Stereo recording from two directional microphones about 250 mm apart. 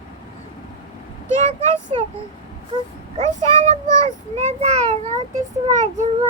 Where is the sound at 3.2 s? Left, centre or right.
Right.